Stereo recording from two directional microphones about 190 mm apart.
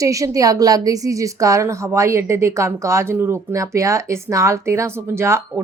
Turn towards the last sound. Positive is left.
turn(degrees=-15)  # may be behind; listen again after turning